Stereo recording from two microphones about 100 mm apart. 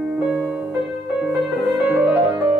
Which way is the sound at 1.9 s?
20° right (ahead or behind).